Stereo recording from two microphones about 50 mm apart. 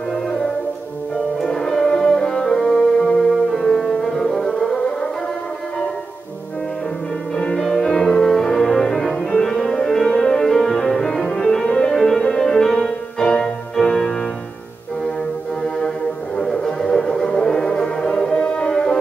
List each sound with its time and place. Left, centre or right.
0.1 s music: centre
7.3 s music: centre
12.8 s keyboard: centre
16.3 s music: centre